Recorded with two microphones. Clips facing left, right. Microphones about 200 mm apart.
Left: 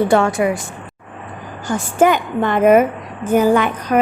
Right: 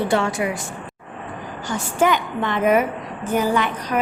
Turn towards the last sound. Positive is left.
turn(degrees=50)  # may be behind; listen again after turning